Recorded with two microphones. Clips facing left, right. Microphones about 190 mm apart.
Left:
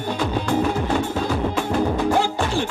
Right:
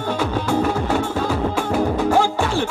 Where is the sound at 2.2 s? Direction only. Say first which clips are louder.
Right 2 dB; 15° left (ahead or behind).